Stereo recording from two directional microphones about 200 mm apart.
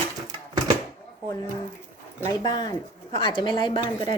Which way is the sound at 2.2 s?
20° left (ahead or behind).